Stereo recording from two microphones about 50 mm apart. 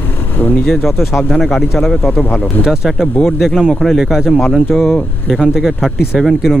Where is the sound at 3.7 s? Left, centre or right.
Centre.